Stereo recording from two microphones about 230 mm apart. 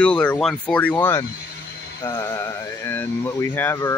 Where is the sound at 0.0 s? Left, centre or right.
Centre.